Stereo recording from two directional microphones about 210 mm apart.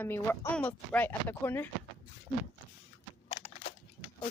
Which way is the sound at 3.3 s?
25° left (ahead or behind).